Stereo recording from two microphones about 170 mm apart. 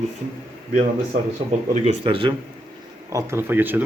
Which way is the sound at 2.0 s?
30° right (ahead or behind).